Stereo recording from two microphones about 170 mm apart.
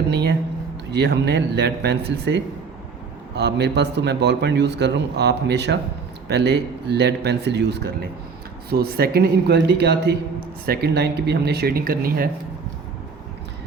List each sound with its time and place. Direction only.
0.1 s speech: 70° right (ahead or behind)
0.9 s a man's voice: 80° right
6.2 s a man's voice: 75° right (ahead or behind)
8.7 s speech: 65° right (ahead or behind)